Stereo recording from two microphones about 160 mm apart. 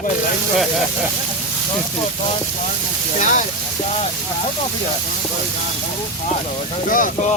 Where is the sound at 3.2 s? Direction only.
55° left (ahead or behind).